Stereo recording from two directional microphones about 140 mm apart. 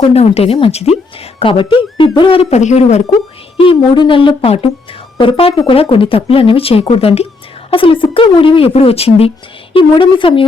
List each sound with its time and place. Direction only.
0.1 s speech: 45° left (ahead or behind)
3.6 s a woman's voice: 35° left (ahead or behind)